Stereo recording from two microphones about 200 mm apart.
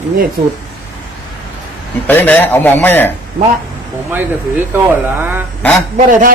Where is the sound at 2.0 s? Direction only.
10° left (ahead or behind).